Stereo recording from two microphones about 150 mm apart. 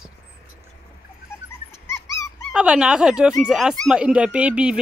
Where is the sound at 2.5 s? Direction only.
5° right (ahead or behind).